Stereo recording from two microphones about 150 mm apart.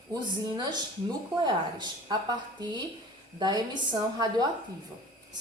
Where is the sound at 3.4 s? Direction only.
30° right (ahead or behind).